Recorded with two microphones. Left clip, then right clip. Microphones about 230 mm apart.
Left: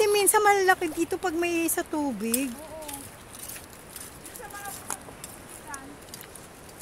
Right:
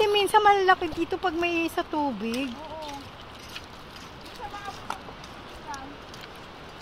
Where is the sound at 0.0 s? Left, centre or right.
Left.